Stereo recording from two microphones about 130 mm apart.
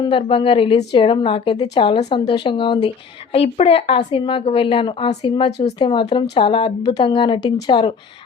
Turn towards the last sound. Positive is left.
turn(degrees=35)  # may be behind; listen again after turning